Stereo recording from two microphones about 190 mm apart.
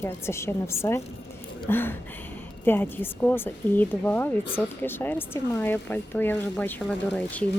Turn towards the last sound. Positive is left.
turn(degrees=5)  # may be behind; listen again after turning